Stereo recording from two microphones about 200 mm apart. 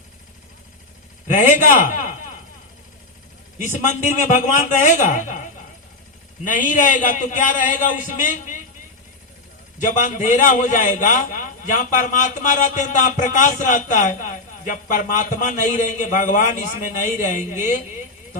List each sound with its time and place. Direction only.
1.3 s a man's voice: 40° left (ahead or behind)
3.6 s a man's voice: 40° left (ahead or behind)
6.4 s a man's voice: 40° left (ahead or behind)
9.7 s a man's voice: 40° left (ahead or behind)